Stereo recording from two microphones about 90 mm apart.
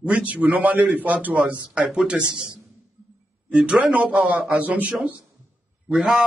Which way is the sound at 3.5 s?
15° right (ahead or behind).